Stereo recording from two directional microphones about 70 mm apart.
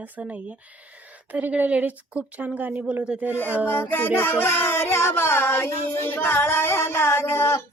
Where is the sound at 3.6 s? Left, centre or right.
Left.